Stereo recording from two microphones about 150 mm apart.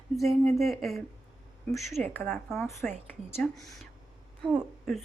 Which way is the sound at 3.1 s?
15° left (ahead or behind).